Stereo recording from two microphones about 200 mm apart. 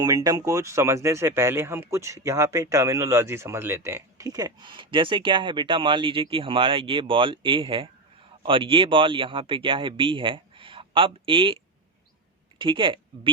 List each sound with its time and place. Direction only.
0.0 s speech: 20° right (ahead or behind)